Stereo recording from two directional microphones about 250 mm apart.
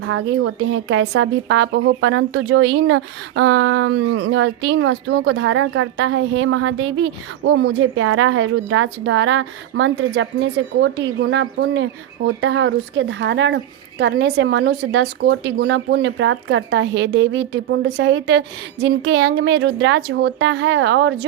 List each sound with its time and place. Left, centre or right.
0.0 s speech: right